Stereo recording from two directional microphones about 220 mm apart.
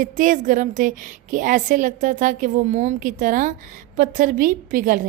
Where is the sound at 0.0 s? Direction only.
35° right (ahead or behind).